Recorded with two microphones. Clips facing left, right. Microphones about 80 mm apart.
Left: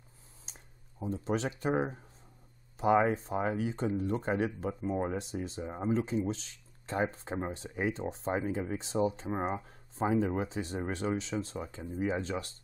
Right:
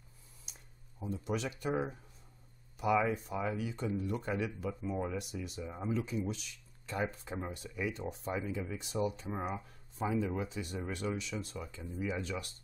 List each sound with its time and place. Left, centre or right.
0.5 s a sound: left
1.0 s speech: left
5.2 s speech: left